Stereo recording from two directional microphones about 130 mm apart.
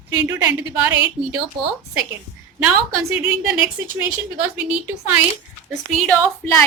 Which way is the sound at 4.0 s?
10° right (ahead or behind).